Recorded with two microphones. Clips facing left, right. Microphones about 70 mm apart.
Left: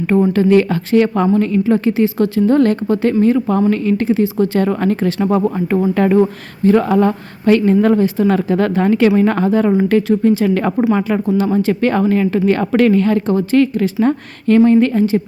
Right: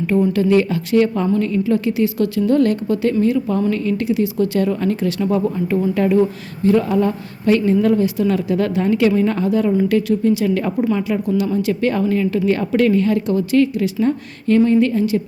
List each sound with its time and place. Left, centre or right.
0.1 s speech: left
1.6 s speech: left
5.2 s speech: left
8.3 s speech: left
10.4 s speech: left
11.3 s speech: left
13.2 s speech: left
13.6 s speech: left